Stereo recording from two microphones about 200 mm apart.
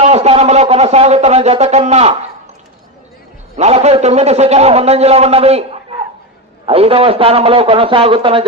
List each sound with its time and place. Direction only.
0.0 s a man's voice: 35° right (ahead or behind)
3.6 s a man's voice: 30° right (ahead or behind)